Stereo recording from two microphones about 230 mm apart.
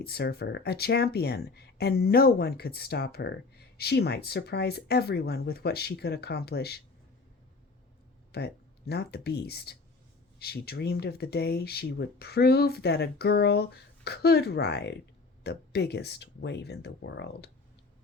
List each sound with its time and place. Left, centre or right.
0.0 s speech: left
8.3 s speech: left